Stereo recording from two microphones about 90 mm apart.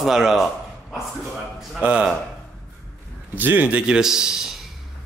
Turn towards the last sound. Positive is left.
turn(degrees=-5)  # may be behind; listen again after turning